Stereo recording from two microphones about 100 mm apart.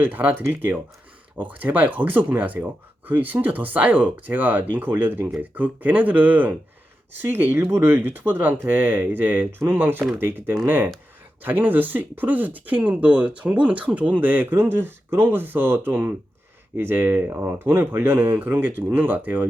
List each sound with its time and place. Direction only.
0.0 s speech: 15° right (ahead or behind)